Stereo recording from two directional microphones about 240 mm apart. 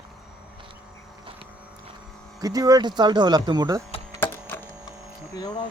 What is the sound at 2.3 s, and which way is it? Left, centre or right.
Speech, centre.